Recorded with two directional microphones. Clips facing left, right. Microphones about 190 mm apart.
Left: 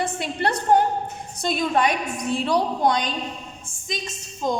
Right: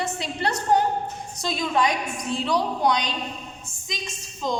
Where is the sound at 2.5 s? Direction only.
50° left (ahead or behind).